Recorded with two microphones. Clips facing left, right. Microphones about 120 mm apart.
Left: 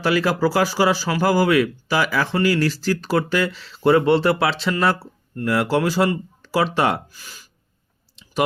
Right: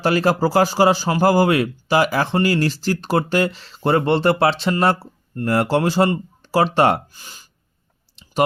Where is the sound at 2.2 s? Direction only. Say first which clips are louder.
Right 1 dB; 35° right (ahead or behind).